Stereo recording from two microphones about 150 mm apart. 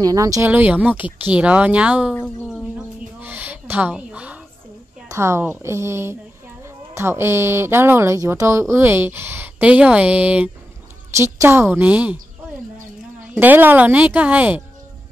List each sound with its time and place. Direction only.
0.0 s speech: 25° right (ahead or behind)
0.5 s speech: 10° right (ahead or behind)
3.2 s a sound: 10° right (ahead or behind)
5.0 s speech: 20° right (ahead or behind)
13.3 s speech: 10° right (ahead or behind)